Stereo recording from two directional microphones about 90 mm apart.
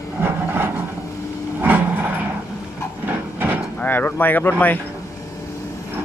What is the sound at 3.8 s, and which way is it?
Speech, 20° left (ahead or behind).